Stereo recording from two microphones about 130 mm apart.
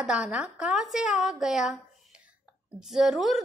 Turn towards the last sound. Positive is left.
turn(degrees=0)  # may be behind; listen again after turning